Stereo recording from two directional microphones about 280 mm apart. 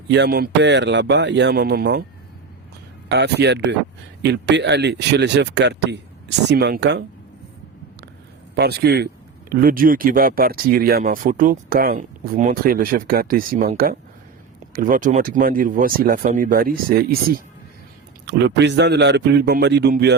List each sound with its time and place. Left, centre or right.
0.1 s speech: right
3.1 s speech: right
8.5 s speech: right
18.3 s speech: right